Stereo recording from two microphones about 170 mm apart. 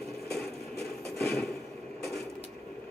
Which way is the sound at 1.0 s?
Centre (ahead or behind).